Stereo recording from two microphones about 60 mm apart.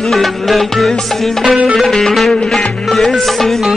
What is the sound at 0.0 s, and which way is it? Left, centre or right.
Music, centre.